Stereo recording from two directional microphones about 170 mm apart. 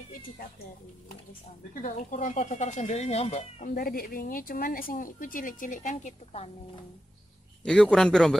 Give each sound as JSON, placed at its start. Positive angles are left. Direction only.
{"t": 1.8, "sound": "speech", "side_deg": 50}
{"t": 3.7, "sound": "speech", "side_deg": 60}
{"t": 7.6, "sound": "a man's voice", "side_deg": 5}